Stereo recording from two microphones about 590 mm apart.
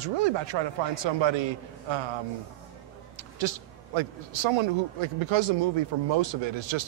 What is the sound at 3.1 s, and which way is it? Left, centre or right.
A man's voice, right.